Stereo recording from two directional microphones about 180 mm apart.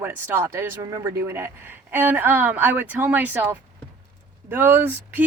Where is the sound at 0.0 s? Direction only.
15° right (ahead or behind).